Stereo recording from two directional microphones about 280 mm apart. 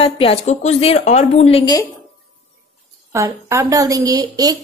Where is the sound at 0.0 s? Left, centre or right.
Centre.